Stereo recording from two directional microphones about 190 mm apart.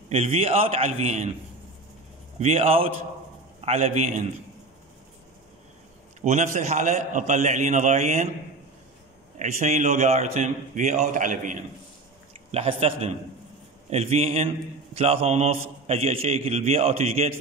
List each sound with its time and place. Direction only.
0.1 s a man's voice: 30° right (ahead or behind)
2.4 s a man's voice: 30° right (ahead or behind)
6.2 s a man's voice: 35° right (ahead or behind)
9.4 s a man's voice: 40° right (ahead or behind)
12.4 s a man's voice: 30° right (ahead or behind)